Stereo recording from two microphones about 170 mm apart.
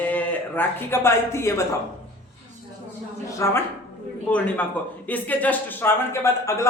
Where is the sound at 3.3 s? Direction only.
15° left (ahead or behind).